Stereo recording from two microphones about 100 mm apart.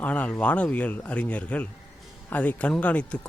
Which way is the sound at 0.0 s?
15° left (ahead or behind).